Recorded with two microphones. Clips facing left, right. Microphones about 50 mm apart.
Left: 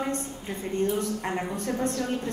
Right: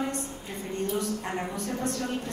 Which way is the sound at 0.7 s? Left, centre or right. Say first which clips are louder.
Left 3 dB; left.